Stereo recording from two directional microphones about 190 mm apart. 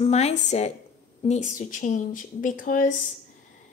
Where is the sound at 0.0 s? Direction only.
35° left (ahead or behind).